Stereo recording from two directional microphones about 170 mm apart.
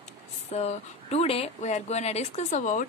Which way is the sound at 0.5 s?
40° left (ahead or behind).